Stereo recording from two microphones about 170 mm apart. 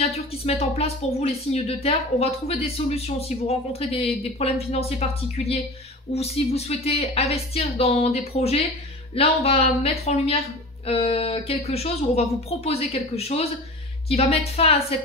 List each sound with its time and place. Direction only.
0.0 s speech: 35° left (ahead or behind)